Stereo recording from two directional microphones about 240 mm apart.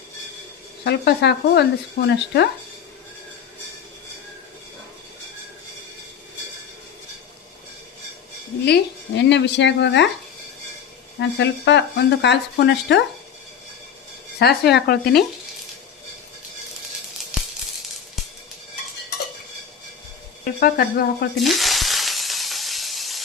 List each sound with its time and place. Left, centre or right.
0.9 s speech: left
8.6 s speech: left
11.2 s speech: left
14.3 s speech: left
20.4 s speech: left
21.3 s sizzle: centre